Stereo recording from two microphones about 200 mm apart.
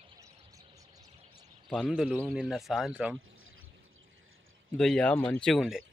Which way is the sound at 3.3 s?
90° right.